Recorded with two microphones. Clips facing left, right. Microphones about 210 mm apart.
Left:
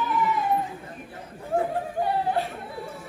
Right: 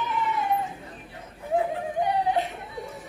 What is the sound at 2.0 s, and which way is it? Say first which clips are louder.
Whimper: right 1 dB; 20° right (ahead or behind).